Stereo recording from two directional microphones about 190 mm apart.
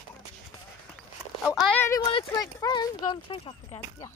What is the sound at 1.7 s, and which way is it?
Speech, 10° left (ahead or behind).